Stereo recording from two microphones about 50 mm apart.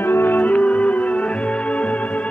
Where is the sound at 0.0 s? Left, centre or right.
Left.